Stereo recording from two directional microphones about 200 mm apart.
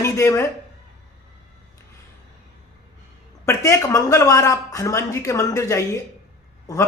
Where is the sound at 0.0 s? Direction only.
15° left (ahead or behind).